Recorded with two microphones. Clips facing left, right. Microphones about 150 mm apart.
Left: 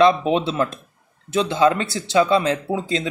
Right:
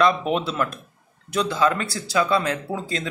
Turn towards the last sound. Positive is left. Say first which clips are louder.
# left 5 dB
turn(degrees=20)  # may be behind; listen again after turning